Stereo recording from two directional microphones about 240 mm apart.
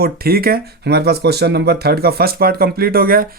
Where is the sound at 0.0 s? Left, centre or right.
Right.